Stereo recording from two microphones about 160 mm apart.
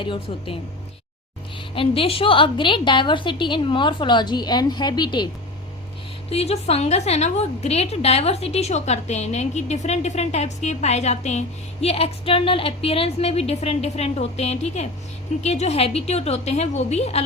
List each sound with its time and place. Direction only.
0.0 s a woman's voice: 30° left (ahead or behind)
1.7 s a woman's voice: 35° left (ahead or behind)
6.3 s a woman's voice: 40° left (ahead or behind)